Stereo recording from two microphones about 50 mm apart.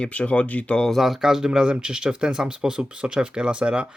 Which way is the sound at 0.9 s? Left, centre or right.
Centre.